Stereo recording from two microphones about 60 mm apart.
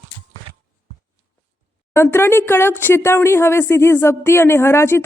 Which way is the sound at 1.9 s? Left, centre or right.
Left.